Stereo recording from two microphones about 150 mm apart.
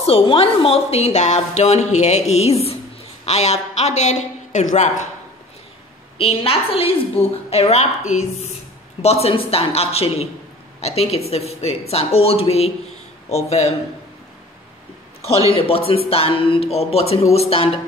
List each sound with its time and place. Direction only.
0.0 s a woman's voice: 40° left (ahead or behind); by 5.0 s 55° left (ahead or behind)
6.1 s a woman's voice: 40° left (ahead or behind)
15.2 s a woman's voice: 40° left (ahead or behind)